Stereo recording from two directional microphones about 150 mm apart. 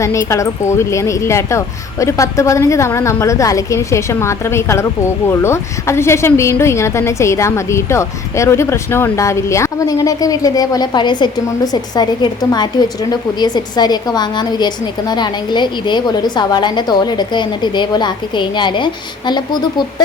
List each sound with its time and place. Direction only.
0.0 s speech: 20° left (ahead or behind)